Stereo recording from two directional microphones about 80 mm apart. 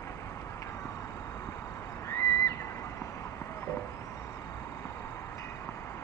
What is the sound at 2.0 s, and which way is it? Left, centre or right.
Neigh, left.